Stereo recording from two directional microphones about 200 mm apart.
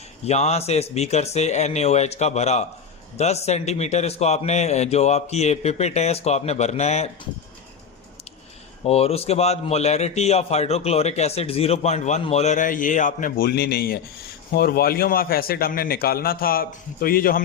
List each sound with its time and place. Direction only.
0.3 s a man's voice: 30° left (ahead or behind)
8.8 s a man's voice: 30° left (ahead or behind); by 17.4 s 45° left (ahead or behind)